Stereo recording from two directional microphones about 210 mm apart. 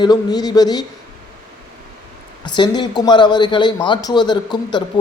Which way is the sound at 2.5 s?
20° left (ahead or behind).